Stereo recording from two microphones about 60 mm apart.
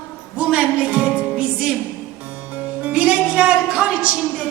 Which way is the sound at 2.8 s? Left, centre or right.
Right.